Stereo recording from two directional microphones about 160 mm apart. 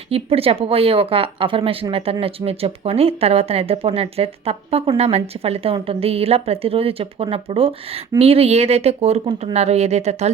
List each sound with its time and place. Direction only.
0.1 s speech: 35° right (ahead or behind)